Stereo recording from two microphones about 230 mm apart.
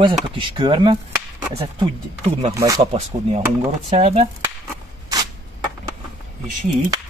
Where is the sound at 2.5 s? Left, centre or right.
Centre.